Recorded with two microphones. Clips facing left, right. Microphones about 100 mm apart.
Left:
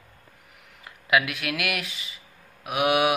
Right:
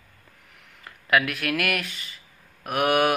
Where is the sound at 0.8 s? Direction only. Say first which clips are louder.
Right 1 dB; 10° left (ahead or behind).